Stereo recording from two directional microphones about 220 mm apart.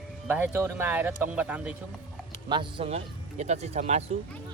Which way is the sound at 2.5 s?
20° right (ahead or behind).